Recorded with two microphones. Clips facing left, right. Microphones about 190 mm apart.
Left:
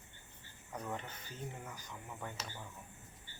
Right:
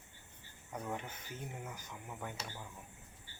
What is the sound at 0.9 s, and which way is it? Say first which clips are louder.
Speech: right 1 dB; 10° right (ahead or behind).